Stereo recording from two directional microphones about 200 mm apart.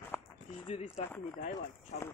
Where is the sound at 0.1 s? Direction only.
10° left (ahead or behind).